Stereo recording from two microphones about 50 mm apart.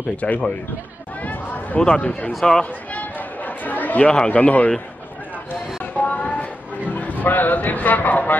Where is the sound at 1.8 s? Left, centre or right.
Centre.